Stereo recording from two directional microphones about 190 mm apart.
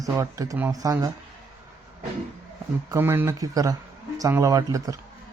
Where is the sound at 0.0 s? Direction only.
15° right (ahead or behind).